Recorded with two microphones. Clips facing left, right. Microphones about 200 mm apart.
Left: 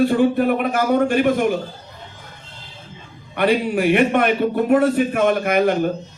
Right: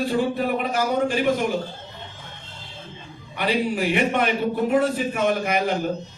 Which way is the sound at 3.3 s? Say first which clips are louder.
Left 5 dB; 55° left (ahead or behind).